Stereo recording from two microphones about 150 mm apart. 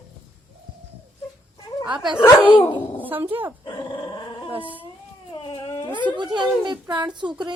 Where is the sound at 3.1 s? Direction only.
15° right (ahead or behind).